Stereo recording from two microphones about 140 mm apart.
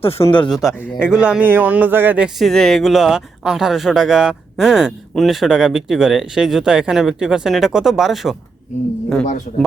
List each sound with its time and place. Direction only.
0.0 s speech: 45° left (ahead or behind)
0.5 s speech: centre (ahead or behind)